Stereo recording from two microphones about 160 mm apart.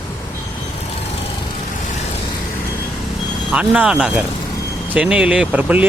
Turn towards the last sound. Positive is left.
turn(degrees=-10)  # may be behind; listen again after turning